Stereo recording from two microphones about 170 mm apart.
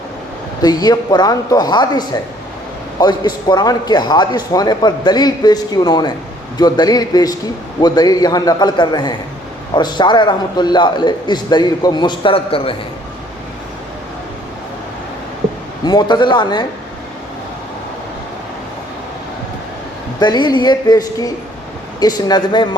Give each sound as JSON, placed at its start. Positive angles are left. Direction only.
{"t": 0.6, "sound": "speech", "side_deg": 25}
{"t": 15.8, "sound": "speech", "side_deg": 25}
{"t": 20.1, "sound": "speech", "side_deg": 25}